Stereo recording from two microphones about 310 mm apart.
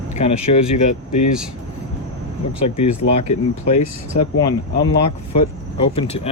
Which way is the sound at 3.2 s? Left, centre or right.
Left.